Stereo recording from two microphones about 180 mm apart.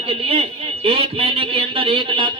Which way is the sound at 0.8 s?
30° right (ahead or behind).